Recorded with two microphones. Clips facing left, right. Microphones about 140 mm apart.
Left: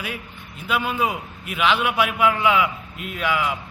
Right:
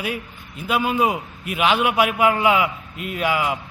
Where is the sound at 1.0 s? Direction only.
45° right (ahead or behind).